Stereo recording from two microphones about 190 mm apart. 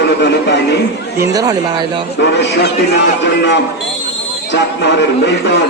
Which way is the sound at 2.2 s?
65° left (ahead or behind).